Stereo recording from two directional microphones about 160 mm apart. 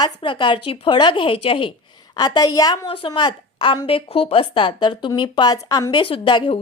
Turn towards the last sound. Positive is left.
turn(degrees=30)  # may be behind; listen again after turning